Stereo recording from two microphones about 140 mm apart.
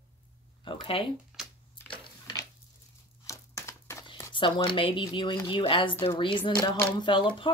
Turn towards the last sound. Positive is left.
turn(degrees=35)  # may be behind; listen again after turning